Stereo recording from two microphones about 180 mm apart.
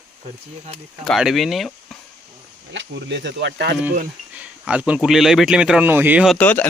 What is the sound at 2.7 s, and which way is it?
Speech, 75° right (ahead or behind).